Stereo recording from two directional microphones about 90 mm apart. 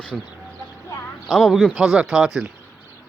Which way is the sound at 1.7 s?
5° right (ahead or behind).